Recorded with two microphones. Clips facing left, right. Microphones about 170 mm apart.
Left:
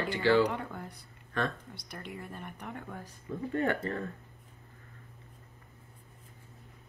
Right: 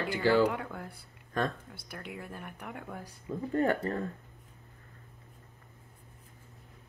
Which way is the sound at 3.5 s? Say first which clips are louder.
Right 2 dB; 35° right (ahead or behind).